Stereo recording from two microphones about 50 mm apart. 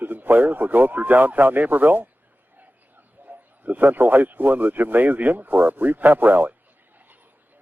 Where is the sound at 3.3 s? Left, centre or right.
Right.